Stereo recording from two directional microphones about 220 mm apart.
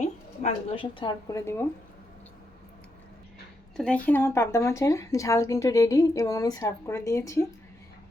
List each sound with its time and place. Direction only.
0.0 s speech: 30° left (ahead or behind); by 1.6 s 15° left (ahead or behind)
3.8 s speech: 5° left (ahead or behind)